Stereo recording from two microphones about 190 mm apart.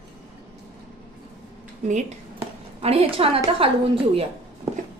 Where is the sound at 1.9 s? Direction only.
40° right (ahead or behind).